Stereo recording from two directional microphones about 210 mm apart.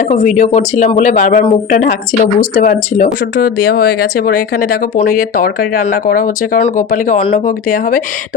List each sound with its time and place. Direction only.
0.0 s speech: 35° left (ahead or behind)